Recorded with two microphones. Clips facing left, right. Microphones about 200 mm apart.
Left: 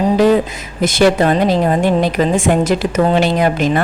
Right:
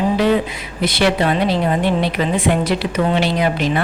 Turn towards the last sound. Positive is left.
turn(degrees=45)  # may be behind; listen again after turning